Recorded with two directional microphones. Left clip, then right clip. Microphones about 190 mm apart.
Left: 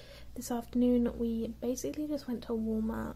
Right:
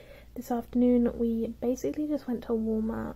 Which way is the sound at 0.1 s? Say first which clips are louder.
Right 5 dB; 20° right (ahead or behind).